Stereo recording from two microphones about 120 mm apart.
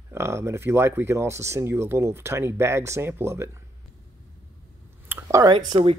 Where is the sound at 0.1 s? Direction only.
20° right (ahead or behind).